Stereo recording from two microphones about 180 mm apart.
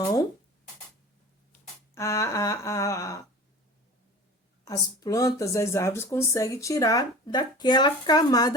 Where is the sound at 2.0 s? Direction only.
15° left (ahead or behind).